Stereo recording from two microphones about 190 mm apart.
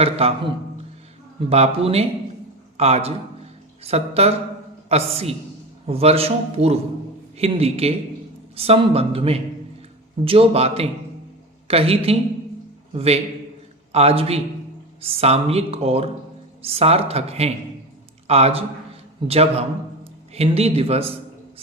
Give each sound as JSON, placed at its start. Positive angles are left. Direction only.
{"t": 0.0, "sound": "a man's voice", "side_deg": -30}